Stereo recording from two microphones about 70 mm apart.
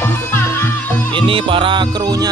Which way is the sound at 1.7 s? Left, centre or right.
Right.